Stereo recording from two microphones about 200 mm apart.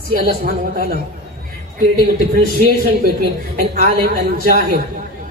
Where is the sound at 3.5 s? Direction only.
45° right (ahead or behind).